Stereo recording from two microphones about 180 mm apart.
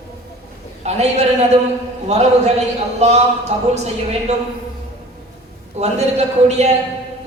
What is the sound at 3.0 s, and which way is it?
Speech, 35° right (ahead or behind).